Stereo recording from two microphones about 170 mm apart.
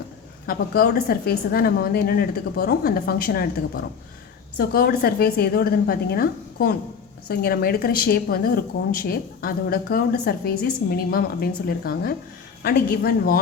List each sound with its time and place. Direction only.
0.4 s a woman's voice: 60° left (ahead or behind)
4.5 s a woman's voice: 60° left (ahead or behind)